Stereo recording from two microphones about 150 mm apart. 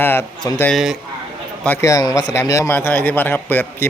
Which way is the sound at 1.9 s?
25° left (ahead or behind).